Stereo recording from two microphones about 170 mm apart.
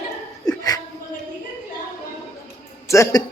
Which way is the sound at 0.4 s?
20° left (ahead or behind).